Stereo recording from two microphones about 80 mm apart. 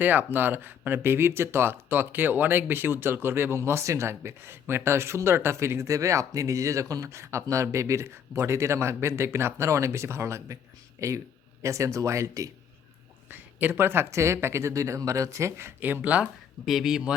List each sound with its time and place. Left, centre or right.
0.0 s speech: right
13.3 s speech: right
15.8 s speech: centre
16.6 s speech: centre